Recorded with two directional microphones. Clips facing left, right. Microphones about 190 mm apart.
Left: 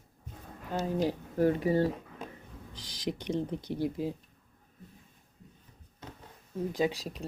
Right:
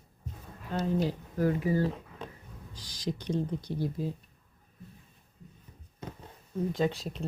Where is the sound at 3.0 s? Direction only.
20° left (ahead or behind).